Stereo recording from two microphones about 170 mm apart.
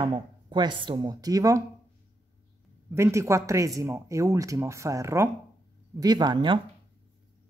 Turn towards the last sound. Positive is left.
turn(degrees=-25)  # may be behind; listen again after turning